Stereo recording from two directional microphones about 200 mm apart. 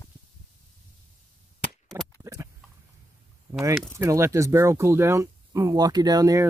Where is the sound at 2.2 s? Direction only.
15° right (ahead or behind).